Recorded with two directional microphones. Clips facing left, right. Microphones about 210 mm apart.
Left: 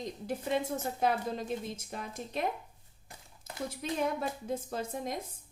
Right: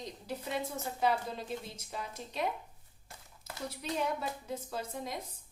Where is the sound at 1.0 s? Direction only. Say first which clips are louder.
Even; 50° left (ahead or behind).